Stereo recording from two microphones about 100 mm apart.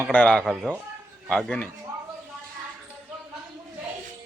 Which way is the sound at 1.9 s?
35° right (ahead or behind).